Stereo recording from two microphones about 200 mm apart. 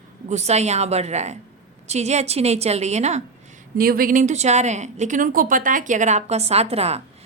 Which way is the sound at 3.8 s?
45° right (ahead or behind).